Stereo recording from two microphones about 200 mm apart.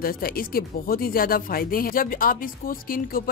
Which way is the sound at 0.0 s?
45° left (ahead or behind).